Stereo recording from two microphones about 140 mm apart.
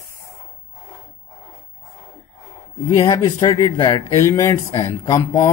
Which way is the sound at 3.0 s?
25° left (ahead or behind).